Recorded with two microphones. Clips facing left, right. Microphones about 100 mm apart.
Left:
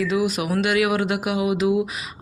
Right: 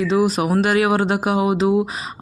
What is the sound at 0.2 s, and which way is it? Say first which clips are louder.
Speech: right 5 dB; 35° right (ahead or behind).